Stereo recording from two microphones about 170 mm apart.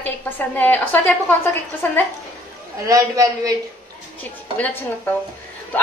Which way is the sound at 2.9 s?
20° right (ahead or behind).